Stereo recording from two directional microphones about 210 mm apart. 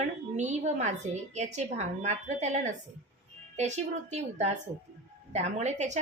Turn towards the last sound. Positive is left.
turn(degrees=-35)  # may be behind; listen again after turning